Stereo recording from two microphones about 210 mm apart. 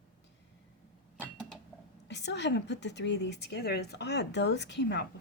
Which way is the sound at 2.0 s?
55° left (ahead or behind).